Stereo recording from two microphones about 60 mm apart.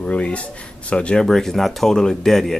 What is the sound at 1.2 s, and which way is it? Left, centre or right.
Speech, centre.